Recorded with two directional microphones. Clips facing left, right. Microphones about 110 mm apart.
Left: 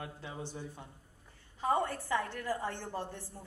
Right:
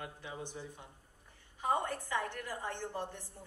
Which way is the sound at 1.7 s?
15° right (ahead or behind).